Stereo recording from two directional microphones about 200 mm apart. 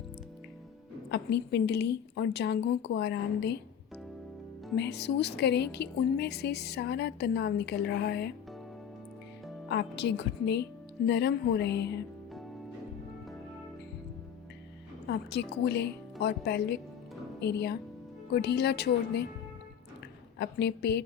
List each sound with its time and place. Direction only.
1.1 s a woman's voice: 60° left (ahead or behind)
4.8 s a woman's voice: 55° left (ahead or behind)
9.6 s a woman's voice: 60° left (ahead or behind)
15.0 s a woman's voice: 55° left (ahead or behind)
20.4 s a woman's voice: 55° left (ahead or behind)